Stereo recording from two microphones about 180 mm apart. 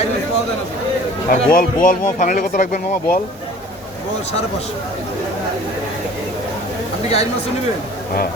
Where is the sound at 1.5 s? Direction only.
45° left (ahead or behind).